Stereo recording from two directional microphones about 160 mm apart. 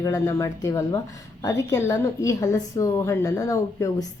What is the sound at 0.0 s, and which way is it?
A woman's voice, 20° left (ahead or behind).